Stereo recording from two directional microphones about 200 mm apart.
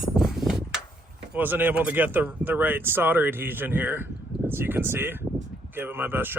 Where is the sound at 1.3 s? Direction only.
10° right (ahead or behind).